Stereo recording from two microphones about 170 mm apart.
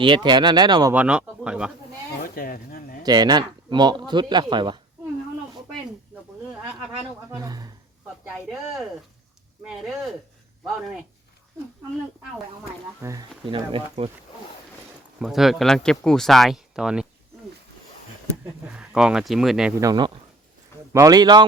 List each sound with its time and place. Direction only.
0.0 s speech: 25° right (ahead or behind)
0.9 s speech: 5° right (ahead or behind)
2.2 s a sound: 60° left (ahead or behind)
3.0 s speech: 25° right (ahead or behind)
7.3 s speech: 20° right (ahead or behind)
8.2 s speech: centre (ahead or behind)
13.0 s speech: 20° right (ahead or behind)
13.4 s speech: 30° right (ahead or behind)
15.2 s speech: centre (ahead or behind)
18.6 s speech: 5° right (ahead or behind)
19.8 s speech: 25° right (ahead or behind)